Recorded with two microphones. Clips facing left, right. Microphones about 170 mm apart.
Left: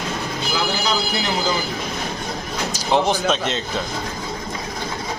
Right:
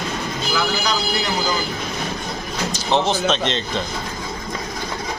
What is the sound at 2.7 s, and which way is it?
A man's voice, 10° left (ahead or behind).